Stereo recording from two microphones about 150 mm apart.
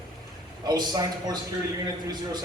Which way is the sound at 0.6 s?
25° right (ahead or behind).